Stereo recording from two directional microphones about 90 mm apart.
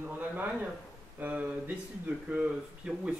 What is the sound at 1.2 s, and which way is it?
Speech, 20° right (ahead or behind).